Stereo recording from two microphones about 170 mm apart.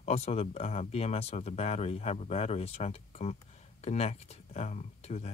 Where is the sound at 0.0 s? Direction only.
40° left (ahead or behind).